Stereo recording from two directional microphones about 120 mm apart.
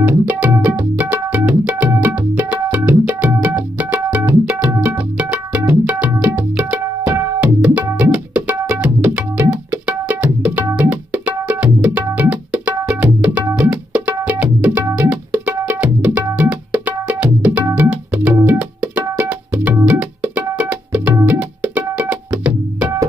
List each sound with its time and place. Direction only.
0.0 s music: 15° right (ahead or behind)